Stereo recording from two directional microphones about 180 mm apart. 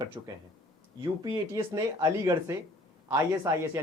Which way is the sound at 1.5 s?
20° right (ahead or behind).